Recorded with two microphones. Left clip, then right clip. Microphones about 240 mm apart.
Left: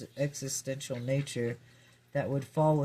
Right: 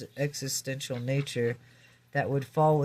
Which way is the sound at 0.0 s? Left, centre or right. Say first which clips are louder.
Right 2 dB; right.